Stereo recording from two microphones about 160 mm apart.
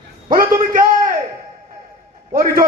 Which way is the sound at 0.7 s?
60° right (ahead or behind).